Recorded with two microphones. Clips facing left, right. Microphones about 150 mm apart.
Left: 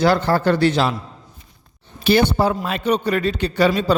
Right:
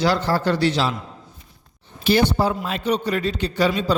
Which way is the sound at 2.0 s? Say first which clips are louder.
Left 2 dB; 60° left (ahead or behind).